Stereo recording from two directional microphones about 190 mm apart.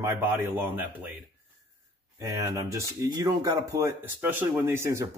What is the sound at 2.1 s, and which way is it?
Speech, 15° right (ahead or behind).